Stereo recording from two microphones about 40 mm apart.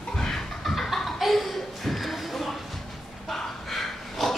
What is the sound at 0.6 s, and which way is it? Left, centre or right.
Laughter, centre.